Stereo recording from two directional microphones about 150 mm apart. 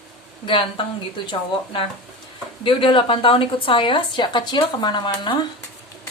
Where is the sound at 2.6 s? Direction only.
35° left (ahead or behind).